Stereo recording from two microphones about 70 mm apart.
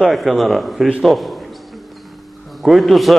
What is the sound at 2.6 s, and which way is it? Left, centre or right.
Speech, centre.